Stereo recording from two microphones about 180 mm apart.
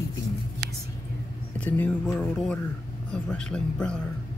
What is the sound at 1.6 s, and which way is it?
Speech, 10° left (ahead or behind).